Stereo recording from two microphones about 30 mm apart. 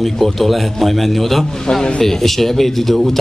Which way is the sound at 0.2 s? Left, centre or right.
Centre.